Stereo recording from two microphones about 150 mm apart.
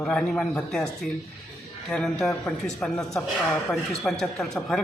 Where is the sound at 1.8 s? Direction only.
5° left (ahead or behind).